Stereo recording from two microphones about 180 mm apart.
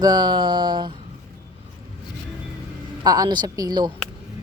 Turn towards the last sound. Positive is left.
turn(degrees=-25)  # may be behind; listen again after turning